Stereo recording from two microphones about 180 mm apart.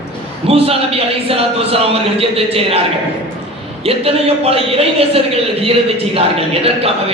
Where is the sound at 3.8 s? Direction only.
35° right (ahead or behind).